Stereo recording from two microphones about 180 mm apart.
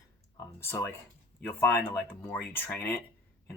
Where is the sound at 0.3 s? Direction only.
15° left (ahead or behind).